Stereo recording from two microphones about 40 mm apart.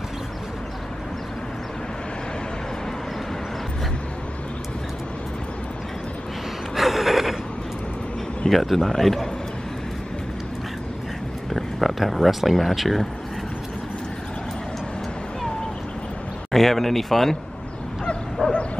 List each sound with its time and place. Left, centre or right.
6.7 s gasp: centre
8.5 s a man's voice: centre
11.5 s speech: centre
16.5 s a man's voice: centre
18.4 s bow-wow: left